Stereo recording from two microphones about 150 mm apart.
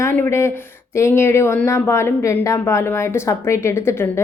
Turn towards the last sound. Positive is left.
turn(degrees=15)  # may be behind; listen again after turning